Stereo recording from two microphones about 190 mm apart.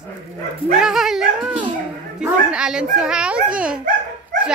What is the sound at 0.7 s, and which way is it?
Dog, 5° right (ahead or behind).